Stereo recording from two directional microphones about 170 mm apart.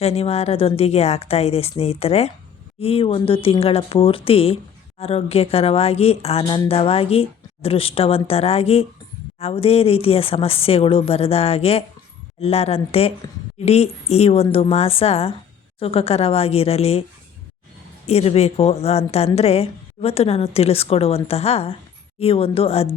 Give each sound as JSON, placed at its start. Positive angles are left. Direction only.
{"t": 0.0, "sound": "speech", "side_deg": 35}
{"t": 18.0, "sound": "speech", "side_deg": 35}